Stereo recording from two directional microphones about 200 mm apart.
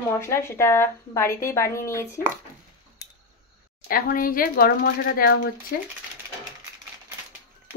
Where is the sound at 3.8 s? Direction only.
45° left (ahead or behind).